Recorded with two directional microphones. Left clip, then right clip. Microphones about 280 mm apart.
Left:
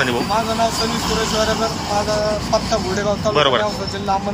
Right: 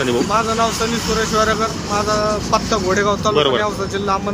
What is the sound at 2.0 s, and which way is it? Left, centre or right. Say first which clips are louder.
Speech: right 2 dB; centre.